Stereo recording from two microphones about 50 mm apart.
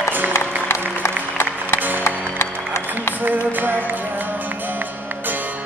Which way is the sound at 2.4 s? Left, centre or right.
Left.